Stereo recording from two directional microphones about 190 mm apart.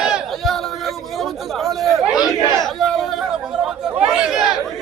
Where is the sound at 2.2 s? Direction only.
20° left (ahead or behind).